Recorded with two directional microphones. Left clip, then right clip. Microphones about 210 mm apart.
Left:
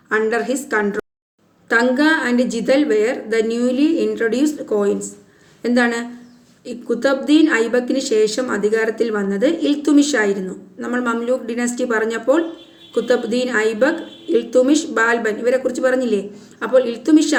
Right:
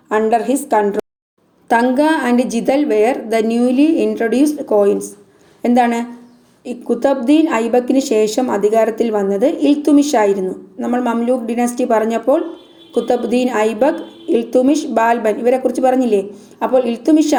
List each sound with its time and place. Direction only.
0.1 s a woman's voice: 15° right (ahead or behind)